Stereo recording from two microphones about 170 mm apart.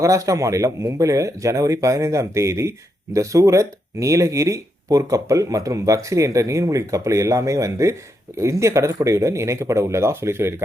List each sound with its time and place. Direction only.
0.0 s speech: 20° right (ahead or behind)